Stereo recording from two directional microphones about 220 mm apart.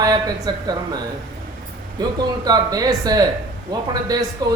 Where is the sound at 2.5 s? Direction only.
15° right (ahead or behind).